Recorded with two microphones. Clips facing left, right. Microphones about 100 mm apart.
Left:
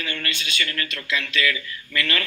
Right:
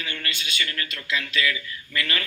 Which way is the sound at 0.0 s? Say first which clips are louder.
Left 3 dB; 25° right (ahead or behind).